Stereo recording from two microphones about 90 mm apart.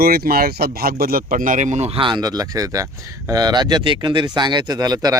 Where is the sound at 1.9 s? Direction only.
65° right (ahead or behind).